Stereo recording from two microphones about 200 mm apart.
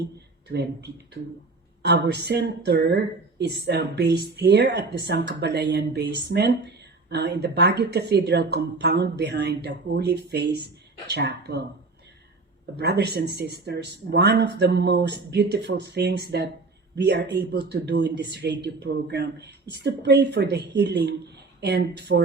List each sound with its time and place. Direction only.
0.4 s speech: 55° right (ahead or behind)
12.7 s speech: 55° right (ahead or behind)